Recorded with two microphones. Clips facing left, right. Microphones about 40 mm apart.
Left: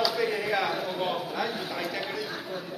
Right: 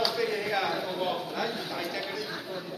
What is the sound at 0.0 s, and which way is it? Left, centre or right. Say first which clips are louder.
A man's voice: left 2 dB; centre.